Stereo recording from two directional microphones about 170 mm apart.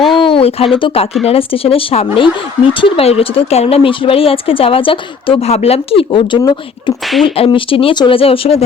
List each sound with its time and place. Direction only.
0.2 s speech: 30° left (ahead or behind)